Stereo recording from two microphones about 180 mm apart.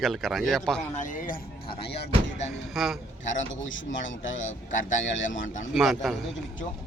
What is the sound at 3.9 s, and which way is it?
Speech, 90° left.